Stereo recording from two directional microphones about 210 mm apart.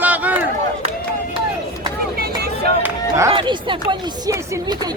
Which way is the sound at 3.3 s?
25° right (ahead or behind).